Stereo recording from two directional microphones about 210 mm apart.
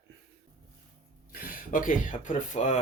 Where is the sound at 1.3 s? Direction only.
40° left (ahead or behind).